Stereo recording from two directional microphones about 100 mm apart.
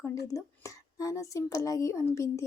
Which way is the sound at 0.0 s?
30° left (ahead or behind).